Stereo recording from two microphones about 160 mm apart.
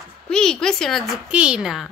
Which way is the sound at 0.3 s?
5° left (ahead or behind).